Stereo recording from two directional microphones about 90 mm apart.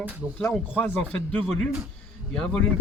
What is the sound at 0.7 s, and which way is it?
Speech, 20° left (ahead or behind).